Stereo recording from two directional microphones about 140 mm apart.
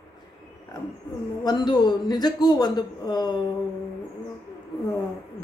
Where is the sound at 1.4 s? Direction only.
30° left (ahead or behind).